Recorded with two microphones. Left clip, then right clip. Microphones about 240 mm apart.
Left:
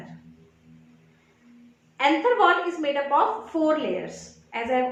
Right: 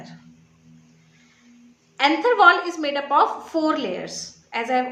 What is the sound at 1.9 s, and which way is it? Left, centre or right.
A woman's voice, right.